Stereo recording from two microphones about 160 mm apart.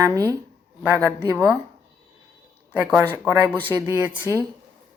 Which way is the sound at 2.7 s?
10° right (ahead or behind).